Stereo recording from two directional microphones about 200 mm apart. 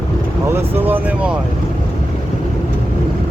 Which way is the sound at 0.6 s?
10° right (ahead or behind).